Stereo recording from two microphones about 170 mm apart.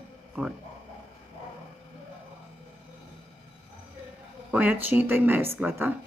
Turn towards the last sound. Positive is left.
turn(degrees=-10)  # may be behind; listen again after turning